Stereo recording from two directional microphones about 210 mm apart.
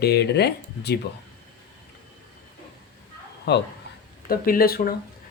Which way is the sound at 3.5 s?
55° left (ahead or behind).